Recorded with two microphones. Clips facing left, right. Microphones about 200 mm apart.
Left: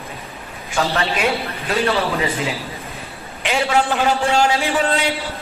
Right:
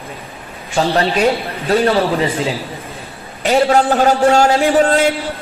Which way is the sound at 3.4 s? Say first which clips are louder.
Right 6 dB; 40° right (ahead or behind).